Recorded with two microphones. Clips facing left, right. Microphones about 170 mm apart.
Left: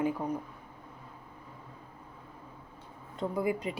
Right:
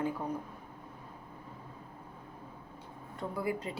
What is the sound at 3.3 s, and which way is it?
Speech, 15° left (ahead or behind).